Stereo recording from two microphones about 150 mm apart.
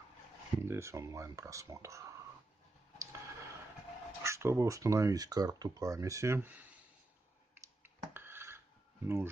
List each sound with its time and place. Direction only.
0.7 s speech: 20° right (ahead or behind)
4.2 s speech: 20° right (ahead or behind)
7.8 s a sound: 15° right (ahead or behind)
9.0 s speech: 15° right (ahead or behind)